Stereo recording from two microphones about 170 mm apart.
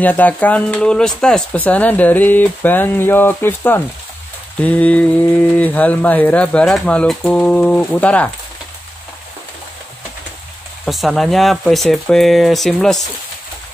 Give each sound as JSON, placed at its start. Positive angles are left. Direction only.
{"t": 0.0, "sound": "speech", "side_deg": 10}
{"t": 10.9, "sound": "speech", "side_deg": 0}